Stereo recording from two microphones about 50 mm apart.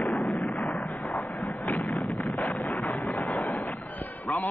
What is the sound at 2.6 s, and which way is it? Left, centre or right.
Wind noise, left.